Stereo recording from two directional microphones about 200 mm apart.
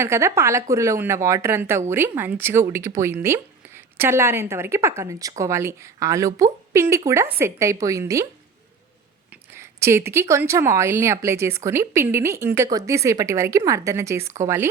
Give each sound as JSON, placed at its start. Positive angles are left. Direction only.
{"t": 0.0, "sound": "speech", "side_deg": -15}
{"t": 9.3, "sound": "speech", "side_deg": -15}